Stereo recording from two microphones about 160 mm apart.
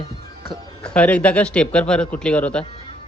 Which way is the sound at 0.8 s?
10° left (ahead or behind).